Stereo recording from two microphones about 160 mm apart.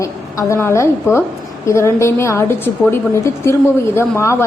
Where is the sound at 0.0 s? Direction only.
20° left (ahead or behind).